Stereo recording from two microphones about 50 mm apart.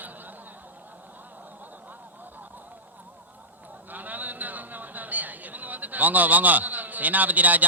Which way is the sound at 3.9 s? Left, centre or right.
Right.